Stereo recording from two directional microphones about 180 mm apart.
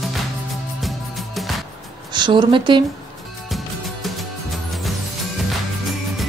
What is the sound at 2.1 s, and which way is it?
Speech, 25° right (ahead or behind).